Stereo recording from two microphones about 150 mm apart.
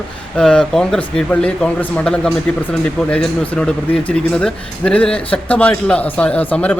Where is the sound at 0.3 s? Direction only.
5° left (ahead or behind).